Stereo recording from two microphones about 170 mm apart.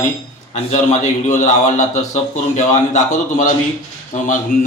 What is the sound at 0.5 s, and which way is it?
A man's voice, 45° left (ahead or behind).